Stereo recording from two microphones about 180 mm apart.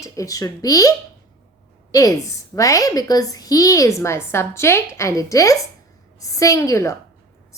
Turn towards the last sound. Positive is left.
turn(degrees=15)  # may be behind; listen again after turning